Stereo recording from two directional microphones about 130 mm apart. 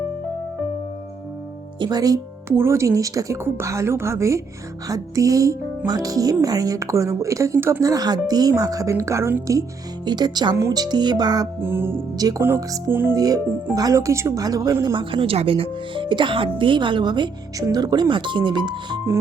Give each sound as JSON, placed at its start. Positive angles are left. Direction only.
{"t": 1.8, "sound": "a woman's voice", "side_deg": -30}
{"t": 10.1, "sound": "speech", "side_deg": -35}
{"t": 11.6, "sound": "speech", "side_deg": -15}
{"t": 12.1, "sound": "a woman's voice", "side_deg": -30}
{"t": 13.1, "sound": "a woman's voice", "side_deg": -30}
{"t": 15.1, "sound": "speech", "side_deg": -45}